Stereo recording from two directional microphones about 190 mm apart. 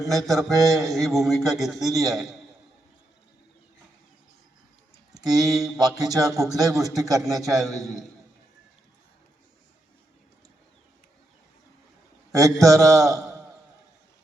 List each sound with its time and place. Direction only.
0.3 s mantra: centre (ahead or behind)
5.1 s a man's voice: 20° right (ahead or behind)
12.3 s a man's voice: 15° right (ahead or behind)